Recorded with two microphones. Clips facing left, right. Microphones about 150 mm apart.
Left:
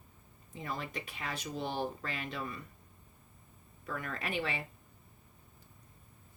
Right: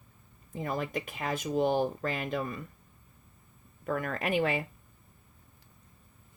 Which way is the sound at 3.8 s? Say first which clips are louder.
Right 8 dB; 50° right (ahead or behind).